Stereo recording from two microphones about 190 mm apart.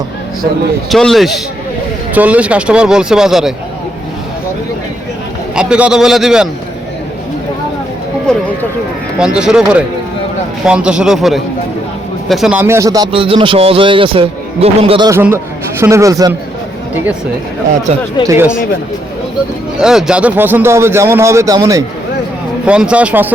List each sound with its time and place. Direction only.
0.9 s speech: centre (ahead or behind)
5.5 s speech: 5° right (ahead or behind)
8.3 s a sound: 5° left (ahead or behind)
9.1 s a man's voice: 5° right (ahead or behind); by 15.1 s 30° right (ahead or behind)
15.1 s a man's voice: 15° right (ahead or behind)
18.3 s a man's voice: 10° right (ahead or behind)
19.8 s a man's voice: 5° right (ahead or behind)
22.6 s a man's voice: 5° right (ahead or behind)